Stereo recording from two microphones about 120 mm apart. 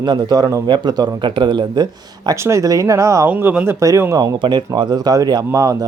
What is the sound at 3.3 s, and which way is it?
Speech, 15° right (ahead or behind).